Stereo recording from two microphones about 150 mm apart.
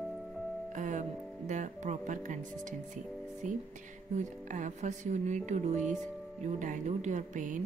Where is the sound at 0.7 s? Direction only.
55° right (ahead or behind).